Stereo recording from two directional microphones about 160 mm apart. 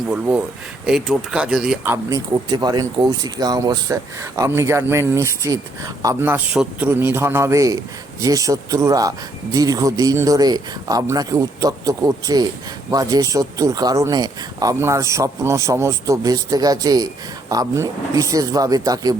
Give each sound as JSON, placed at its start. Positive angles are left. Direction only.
{"t": 0.1, "sound": "speech", "side_deg": -10}
{"t": 1.8, "sound": "speech", "side_deg": -20}